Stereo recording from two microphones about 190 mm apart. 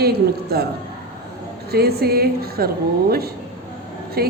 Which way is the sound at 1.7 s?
55° right (ahead or behind).